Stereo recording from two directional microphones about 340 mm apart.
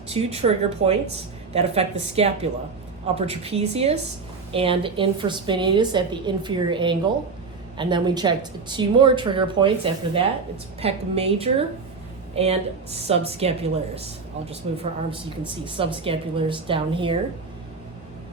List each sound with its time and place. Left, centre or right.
0.1 s a woman's voice: centre